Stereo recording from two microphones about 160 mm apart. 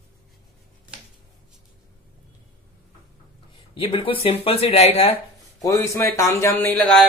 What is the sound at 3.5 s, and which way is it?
Speech, 35° left (ahead or behind).